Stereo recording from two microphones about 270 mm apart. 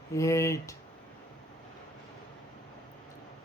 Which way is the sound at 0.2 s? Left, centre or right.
Centre.